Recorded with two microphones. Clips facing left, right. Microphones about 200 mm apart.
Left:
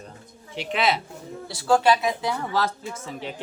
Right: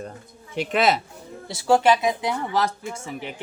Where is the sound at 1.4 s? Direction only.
20° right (ahead or behind).